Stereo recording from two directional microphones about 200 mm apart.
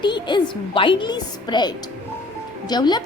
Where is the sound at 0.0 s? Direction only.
25° left (ahead or behind).